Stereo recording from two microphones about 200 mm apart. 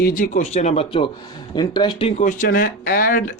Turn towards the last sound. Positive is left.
turn(degrees=45)  # may be behind; listen again after turning